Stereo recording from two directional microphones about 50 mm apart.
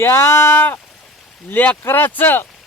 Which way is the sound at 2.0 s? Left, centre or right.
Left.